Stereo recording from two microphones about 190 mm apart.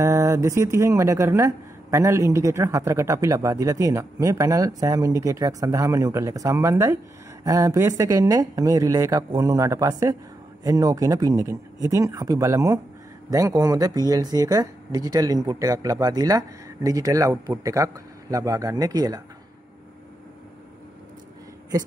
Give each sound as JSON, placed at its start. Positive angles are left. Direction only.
{"t": 0.0, "sound": "speech", "side_deg": -15}